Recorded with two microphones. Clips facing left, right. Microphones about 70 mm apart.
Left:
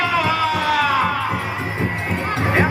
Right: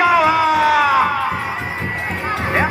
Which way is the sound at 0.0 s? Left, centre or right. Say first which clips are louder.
Right 5 dB; centre.